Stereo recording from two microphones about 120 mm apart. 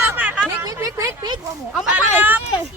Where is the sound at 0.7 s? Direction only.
30° right (ahead or behind).